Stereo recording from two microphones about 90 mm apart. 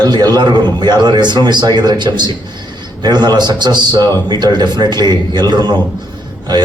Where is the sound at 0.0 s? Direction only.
50° right (ahead or behind).